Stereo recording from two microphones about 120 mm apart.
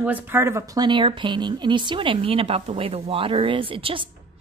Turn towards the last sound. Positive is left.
turn(degrees=-45)  # may be behind; listen again after turning